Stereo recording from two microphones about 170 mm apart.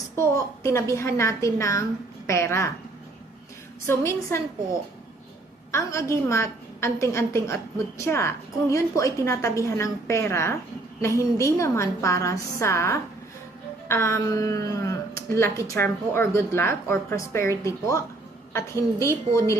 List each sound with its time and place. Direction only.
0.2 s a woman's voice: 15° left (ahead or behind)
3.8 s a woman's voice: 15° left (ahead or behind)
5.7 s a woman's voice: 15° left (ahead or behind)